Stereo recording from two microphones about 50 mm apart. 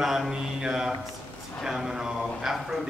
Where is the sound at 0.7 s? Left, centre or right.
Centre.